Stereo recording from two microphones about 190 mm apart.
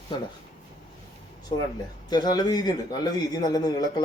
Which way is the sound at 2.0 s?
20° left (ahead or behind).